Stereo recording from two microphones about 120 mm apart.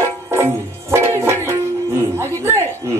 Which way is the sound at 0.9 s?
20° right (ahead or behind).